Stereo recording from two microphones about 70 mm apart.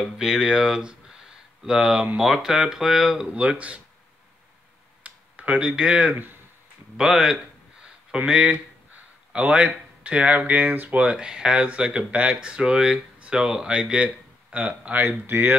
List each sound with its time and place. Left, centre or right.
0.2 s speech: centre
3.3 s speech: centre
5.0 s speech: centre
7.0 s speech: centre; by 15.5 s right